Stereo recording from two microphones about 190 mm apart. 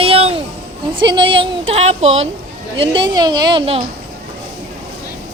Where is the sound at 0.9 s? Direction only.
25° right (ahead or behind).